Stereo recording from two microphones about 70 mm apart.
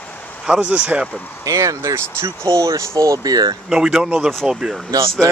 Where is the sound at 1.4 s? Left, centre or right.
Right.